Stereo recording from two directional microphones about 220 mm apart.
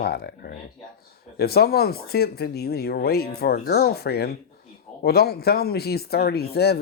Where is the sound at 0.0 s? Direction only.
45° left (ahead or behind).